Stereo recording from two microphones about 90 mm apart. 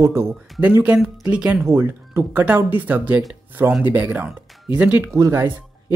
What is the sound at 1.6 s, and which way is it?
Speech, 30° right (ahead or behind).